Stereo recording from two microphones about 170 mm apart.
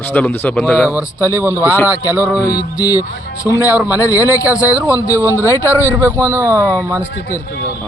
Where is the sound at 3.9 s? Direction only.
20° left (ahead or behind).